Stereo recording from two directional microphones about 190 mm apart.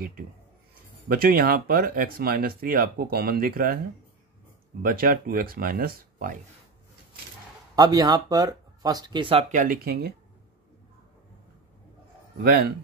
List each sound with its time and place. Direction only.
1.0 s speech: 50° right (ahead or behind)
4.8 s speech: 50° right (ahead or behind)
7.7 s speech: 20° right (ahead or behind)
9.5 s speech: 45° right (ahead or behind)
12.4 s speech: 50° right (ahead or behind)